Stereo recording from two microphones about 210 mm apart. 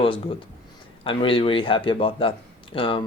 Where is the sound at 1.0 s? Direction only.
25° left (ahead or behind).